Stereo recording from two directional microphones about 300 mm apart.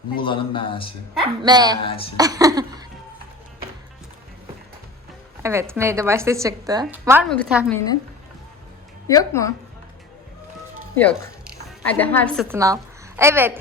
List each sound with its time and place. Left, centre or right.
0.2 s a man's voice: centre
1.2 s a woman's voice: centre
1.8 s a man's voice: centre
2.1 s speech: centre
5.4 s a woman's voice: centre
9.0 s a man's voice: centre
10.9 s a woman's voice: centre
12.5 s a woman's voice: centre